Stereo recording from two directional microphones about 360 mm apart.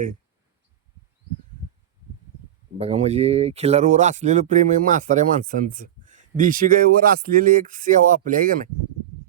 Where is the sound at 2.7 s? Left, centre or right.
Centre.